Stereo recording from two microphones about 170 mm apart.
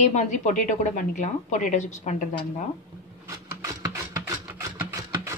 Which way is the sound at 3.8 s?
20° right (ahead or behind).